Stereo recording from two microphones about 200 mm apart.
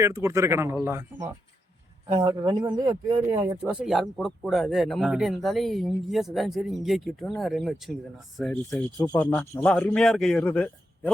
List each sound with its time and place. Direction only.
0.0 s speech: 15° right (ahead or behind)
2.1 s speech: 20° right (ahead or behind)
3.7 s speech: 5° right (ahead or behind)